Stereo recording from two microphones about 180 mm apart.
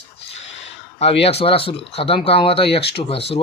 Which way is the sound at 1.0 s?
35° left (ahead or behind).